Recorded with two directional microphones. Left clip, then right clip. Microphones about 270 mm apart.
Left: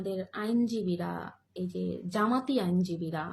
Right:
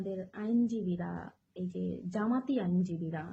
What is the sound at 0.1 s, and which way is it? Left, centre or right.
A woman's voice, centre.